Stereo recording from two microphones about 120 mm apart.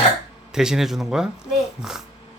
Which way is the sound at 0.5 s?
5° right (ahead or behind).